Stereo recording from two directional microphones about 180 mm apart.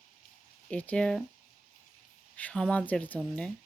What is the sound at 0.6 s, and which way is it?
Speech, 5° left (ahead or behind).